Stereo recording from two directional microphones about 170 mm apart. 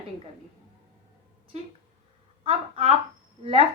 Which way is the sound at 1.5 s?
40° right (ahead or behind).